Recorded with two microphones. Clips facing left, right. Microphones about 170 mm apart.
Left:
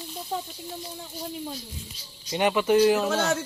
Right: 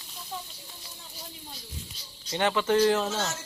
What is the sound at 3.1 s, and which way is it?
Speech, 60° left (ahead or behind).